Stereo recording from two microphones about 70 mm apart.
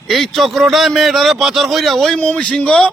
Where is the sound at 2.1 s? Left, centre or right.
Centre.